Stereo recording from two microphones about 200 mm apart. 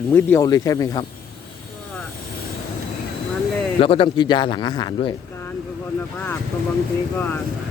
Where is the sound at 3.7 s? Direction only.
30° left (ahead or behind).